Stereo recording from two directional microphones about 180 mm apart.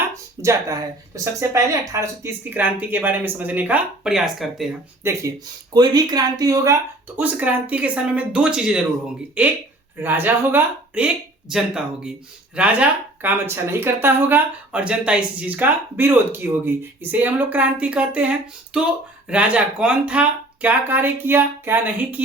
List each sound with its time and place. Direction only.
0.4 s speech: 15° right (ahead or behind); by 4.7 s centre (ahead or behind)
5.0 s speech: 15° right (ahead or behind)
7.2 s speech: 10° right (ahead or behind)